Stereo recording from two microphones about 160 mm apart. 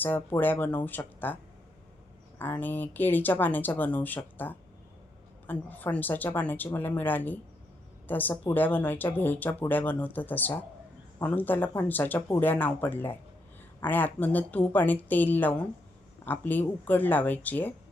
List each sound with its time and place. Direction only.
0.0 s speech: 10° left (ahead or behind)
2.4 s a woman's voice: 10° left (ahead or behind)